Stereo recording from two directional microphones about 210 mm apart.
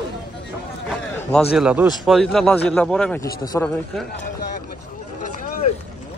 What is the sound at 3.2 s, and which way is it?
Speech, 15° left (ahead or behind).